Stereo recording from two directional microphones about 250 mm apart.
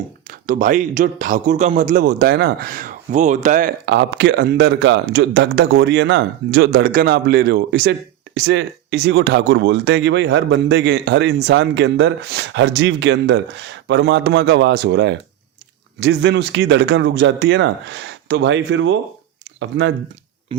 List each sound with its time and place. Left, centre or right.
0.3 s a man's voice: right